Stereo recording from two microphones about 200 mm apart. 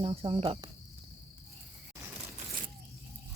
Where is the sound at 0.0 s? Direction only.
30° right (ahead or behind).